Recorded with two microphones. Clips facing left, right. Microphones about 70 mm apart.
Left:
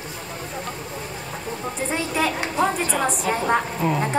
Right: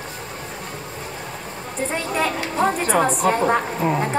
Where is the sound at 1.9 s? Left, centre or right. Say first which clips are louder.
Right 1 dB; centre.